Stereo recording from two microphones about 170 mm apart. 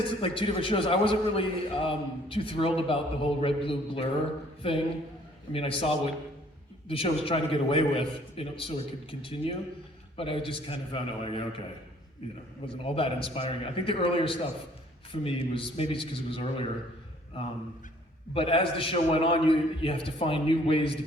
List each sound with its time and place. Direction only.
0.2 s a man's voice: 30° left (ahead or behind)
12.6 s a man's voice: 35° left (ahead or behind)
18.3 s a man's voice: 35° left (ahead or behind)